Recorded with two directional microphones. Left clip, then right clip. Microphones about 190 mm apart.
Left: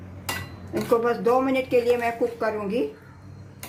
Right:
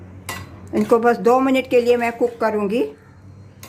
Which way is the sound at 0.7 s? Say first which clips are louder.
Right 6 dB; 35° right (ahead or behind).